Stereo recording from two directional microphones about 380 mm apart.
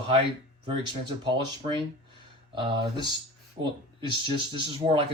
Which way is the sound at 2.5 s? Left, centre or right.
Centre.